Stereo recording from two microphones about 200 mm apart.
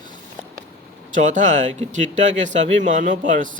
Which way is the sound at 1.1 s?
40° right (ahead or behind).